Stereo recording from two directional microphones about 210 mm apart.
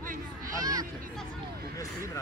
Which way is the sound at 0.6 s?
20° right (ahead or behind).